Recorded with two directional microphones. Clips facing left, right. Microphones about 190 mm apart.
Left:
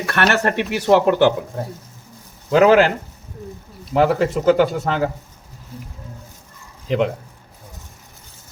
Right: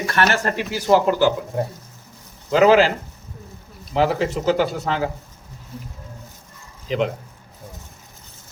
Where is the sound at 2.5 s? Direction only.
55° left (ahead or behind).